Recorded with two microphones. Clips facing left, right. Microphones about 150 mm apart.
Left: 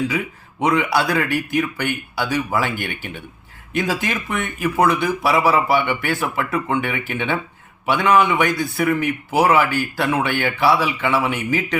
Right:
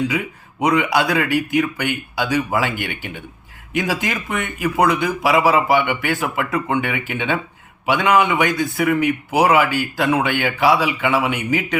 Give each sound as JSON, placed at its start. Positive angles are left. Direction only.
{"t": 0.6, "sound": "a man's voice", "side_deg": -15}